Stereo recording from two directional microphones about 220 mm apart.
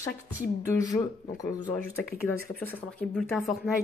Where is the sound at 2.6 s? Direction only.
10° left (ahead or behind).